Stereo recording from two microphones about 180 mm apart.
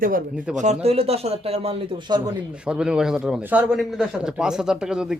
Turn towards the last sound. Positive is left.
turn(degrees=-5)  # may be behind; listen again after turning